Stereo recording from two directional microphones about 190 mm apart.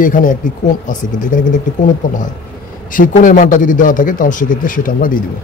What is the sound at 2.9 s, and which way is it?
Speech, 45° left (ahead or behind).